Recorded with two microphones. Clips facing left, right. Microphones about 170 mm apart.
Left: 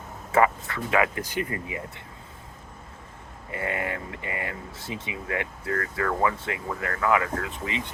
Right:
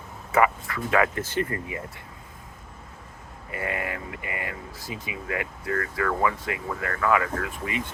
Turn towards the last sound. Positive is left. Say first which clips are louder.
# right 1 dB
turn(degrees=20)  # may be behind; listen again after turning